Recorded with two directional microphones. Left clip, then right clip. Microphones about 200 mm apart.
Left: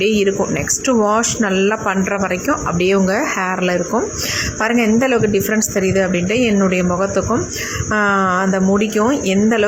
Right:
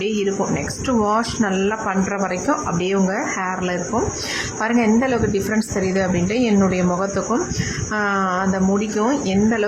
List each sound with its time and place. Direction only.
0.0 s speech: 15° left (ahead or behind)